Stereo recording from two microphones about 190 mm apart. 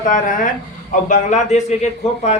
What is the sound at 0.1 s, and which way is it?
A man's voice, 45° left (ahead or behind).